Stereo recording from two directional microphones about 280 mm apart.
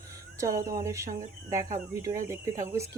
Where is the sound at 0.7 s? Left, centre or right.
Centre.